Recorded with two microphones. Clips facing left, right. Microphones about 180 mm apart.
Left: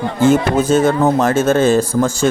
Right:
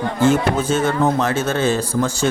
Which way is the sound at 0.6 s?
40° left (ahead or behind).